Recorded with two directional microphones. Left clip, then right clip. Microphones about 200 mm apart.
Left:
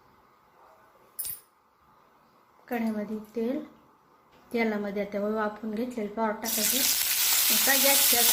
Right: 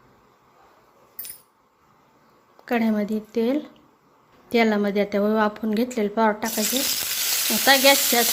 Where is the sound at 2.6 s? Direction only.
45° right (ahead or behind).